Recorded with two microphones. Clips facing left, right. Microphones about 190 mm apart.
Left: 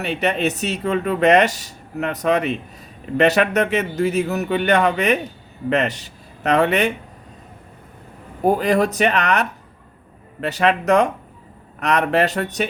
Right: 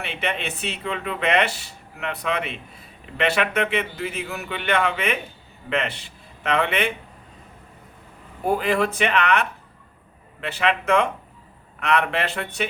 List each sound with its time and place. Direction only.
0.0 s a man's voice: 40° left (ahead or behind)
8.4 s speech: 40° left (ahead or behind)